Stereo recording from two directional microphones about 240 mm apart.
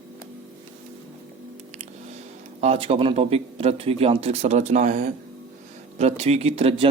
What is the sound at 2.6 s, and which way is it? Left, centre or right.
Speech, right.